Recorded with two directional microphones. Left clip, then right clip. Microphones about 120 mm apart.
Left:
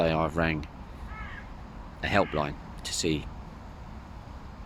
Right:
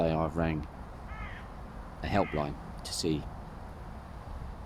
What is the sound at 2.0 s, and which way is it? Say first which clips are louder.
Speech: left 4 dB; 15° right (ahead or behind).